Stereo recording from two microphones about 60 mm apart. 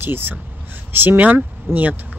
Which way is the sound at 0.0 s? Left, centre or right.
Right.